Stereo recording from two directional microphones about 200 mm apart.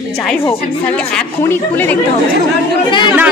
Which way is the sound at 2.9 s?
25° left (ahead or behind).